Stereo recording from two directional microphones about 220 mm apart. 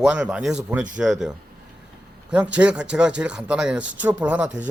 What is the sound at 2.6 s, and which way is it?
Speech, 5° right (ahead or behind).